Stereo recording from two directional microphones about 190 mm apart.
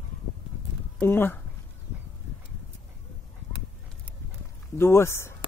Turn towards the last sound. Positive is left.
turn(degrees=15)  # may be behind; listen again after turning